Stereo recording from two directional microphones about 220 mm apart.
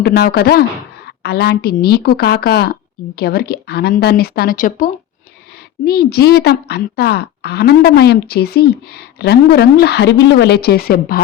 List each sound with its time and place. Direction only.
0.0 s a woman's voice: 45° left (ahead or behind)